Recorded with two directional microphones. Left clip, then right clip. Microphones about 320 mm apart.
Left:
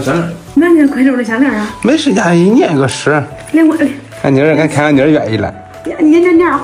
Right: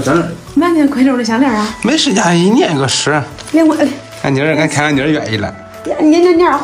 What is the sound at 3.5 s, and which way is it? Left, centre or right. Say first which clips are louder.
Speech: left 1 dB; centre.